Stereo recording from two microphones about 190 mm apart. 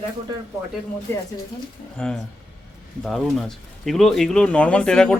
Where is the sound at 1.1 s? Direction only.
15° left (ahead or behind).